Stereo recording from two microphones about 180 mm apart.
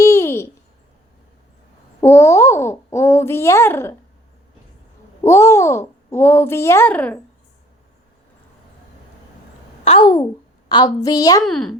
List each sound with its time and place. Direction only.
0.0 s a sound: 15° left (ahead or behind)
2.0 s babbling: 15° left (ahead or behind)
5.2 s a child's voice: 15° left (ahead or behind)
10.0 s a woman's voice: 20° left (ahead or behind)
11.4 s a child's voice: 5° left (ahead or behind)